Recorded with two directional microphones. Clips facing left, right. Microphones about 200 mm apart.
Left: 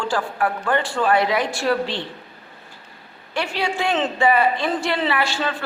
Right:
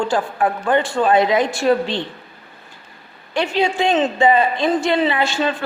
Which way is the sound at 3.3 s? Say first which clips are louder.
Right 5 dB; 20° right (ahead or behind).